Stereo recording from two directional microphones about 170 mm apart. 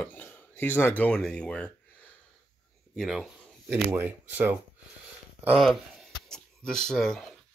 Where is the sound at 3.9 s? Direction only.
10° right (ahead or behind).